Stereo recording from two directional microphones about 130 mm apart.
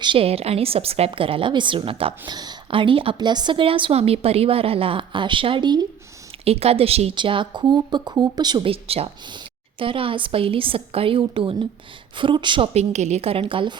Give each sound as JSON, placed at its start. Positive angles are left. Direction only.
{"t": 0.0, "sound": "a woman's voice", "side_deg": -45}
{"t": 2.3, "sound": "a woman's voice", "side_deg": -35}
{"t": 6.4, "sound": "a woman's voice", "side_deg": -50}
{"t": 7.2, "sound": "a woman's voice", "side_deg": -40}
{"t": 12.7, "sound": "a woman's voice", "side_deg": -60}